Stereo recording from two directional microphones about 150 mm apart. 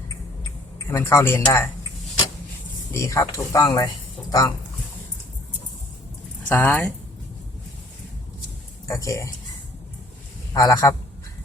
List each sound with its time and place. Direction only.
0.9 s speech: 20° left (ahead or behind)
2.9 s speech: 20° left (ahead or behind)
6.5 s speech: 10° left (ahead or behind)
8.9 s speech: 20° left (ahead or behind)
10.5 s speech: 25° left (ahead or behind)